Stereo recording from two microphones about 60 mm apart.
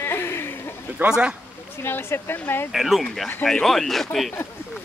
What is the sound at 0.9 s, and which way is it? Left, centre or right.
Speech, centre.